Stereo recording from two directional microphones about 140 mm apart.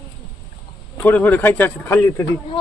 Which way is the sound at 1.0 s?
15° left (ahead or behind).